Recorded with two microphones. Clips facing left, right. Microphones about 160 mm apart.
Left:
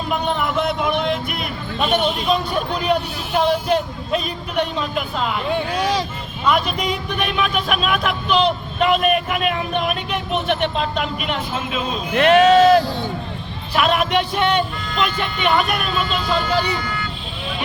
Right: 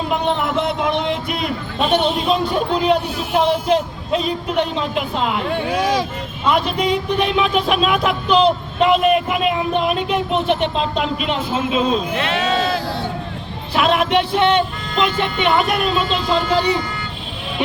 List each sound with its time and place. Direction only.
0.1 s a man's voice: 25° right (ahead or behind)
6.5 s speech: 25° right (ahead or behind)
12.1 s speech: 55° left (ahead or behind)
13.7 s speech: 25° right (ahead or behind)